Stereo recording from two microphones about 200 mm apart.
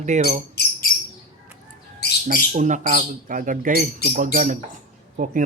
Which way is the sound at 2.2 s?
40° right (ahead or behind).